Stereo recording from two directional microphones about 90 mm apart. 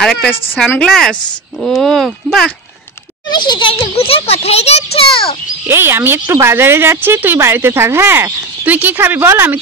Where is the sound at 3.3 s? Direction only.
55° left (ahead or behind); by 4.5 s 90° left.